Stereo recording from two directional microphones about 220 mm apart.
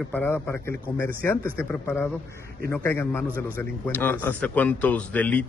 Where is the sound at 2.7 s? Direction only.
10° left (ahead or behind).